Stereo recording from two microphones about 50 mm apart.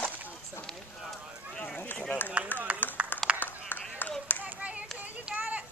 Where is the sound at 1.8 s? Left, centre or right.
Left.